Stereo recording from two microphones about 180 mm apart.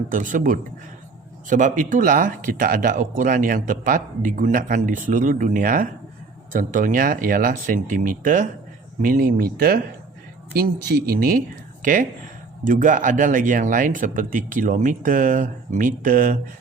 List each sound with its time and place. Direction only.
0.1 s speech: 45° right (ahead or behind)